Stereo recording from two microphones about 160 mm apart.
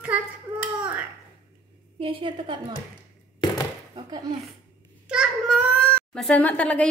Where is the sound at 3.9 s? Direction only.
25° right (ahead or behind).